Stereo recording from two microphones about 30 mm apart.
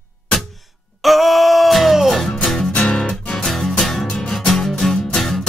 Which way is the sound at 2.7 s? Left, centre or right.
Left.